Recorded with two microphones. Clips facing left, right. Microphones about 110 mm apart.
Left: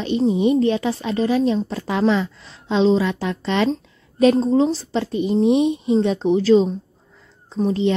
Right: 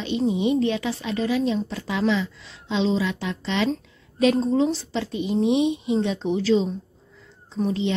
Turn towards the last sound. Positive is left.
turn(degrees=35)  # may be behind; listen again after turning